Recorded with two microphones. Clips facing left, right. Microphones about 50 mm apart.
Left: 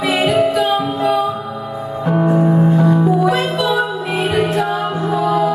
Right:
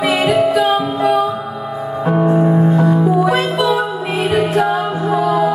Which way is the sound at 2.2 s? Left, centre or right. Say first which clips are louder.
Even; centre.